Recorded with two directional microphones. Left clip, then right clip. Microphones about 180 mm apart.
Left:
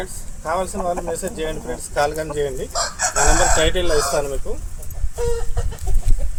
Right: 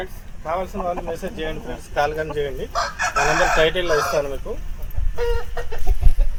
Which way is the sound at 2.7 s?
80° left.